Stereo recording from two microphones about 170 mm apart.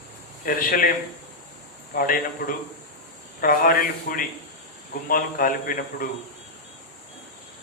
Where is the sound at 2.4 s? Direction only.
55° left (ahead or behind).